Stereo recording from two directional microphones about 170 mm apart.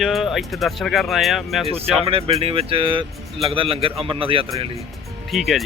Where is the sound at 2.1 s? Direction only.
35° right (ahead or behind).